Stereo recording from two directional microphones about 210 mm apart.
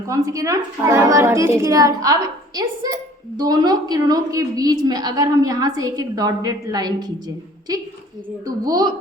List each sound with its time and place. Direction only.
0.1 s a woman's voice: 15° right (ahead or behind)
8.4 s a woman's voice: 20° right (ahead or behind)